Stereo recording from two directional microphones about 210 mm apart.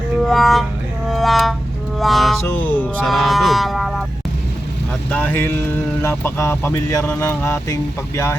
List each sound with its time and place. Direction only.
0.2 s music: centre (ahead or behind)
5.1 s speech: 10° left (ahead or behind)